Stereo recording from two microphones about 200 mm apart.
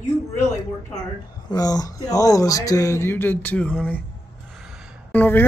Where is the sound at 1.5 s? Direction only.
20° left (ahead or behind).